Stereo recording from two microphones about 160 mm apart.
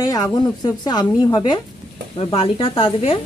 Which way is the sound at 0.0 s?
25° left (ahead or behind).